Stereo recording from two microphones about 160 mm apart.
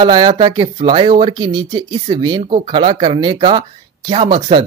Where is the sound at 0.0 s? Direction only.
30° right (ahead or behind).